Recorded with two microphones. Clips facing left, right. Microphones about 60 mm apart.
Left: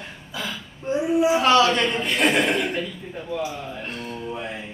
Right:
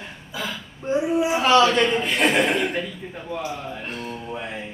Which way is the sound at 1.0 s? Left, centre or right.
Centre.